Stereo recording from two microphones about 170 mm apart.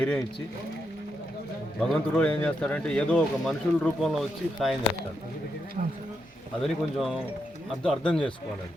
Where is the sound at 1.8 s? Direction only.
5° left (ahead or behind).